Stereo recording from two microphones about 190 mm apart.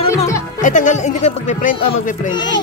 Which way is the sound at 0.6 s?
40° left (ahead or behind).